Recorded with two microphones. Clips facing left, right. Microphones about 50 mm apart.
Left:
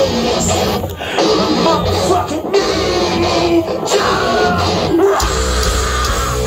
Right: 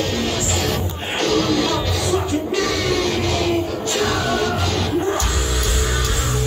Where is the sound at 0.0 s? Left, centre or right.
Left.